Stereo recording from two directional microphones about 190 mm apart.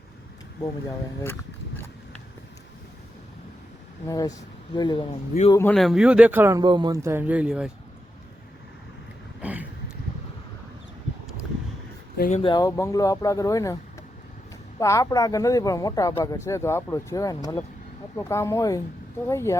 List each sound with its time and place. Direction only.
0.9 s speech: 15° left (ahead or behind)
4.0 s speech: 20° left (ahead or behind)
5.7 s speech: centre (ahead or behind)
9.4 s a sound: 10° right (ahead or behind)
12.1 s speech: 45° left (ahead or behind)
12.4 s speech: 25° left (ahead or behind)
14.8 s speech: 15° left (ahead or behind)